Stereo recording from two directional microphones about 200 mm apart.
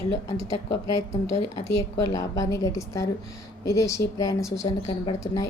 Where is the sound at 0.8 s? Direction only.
15° left (ahead or behind).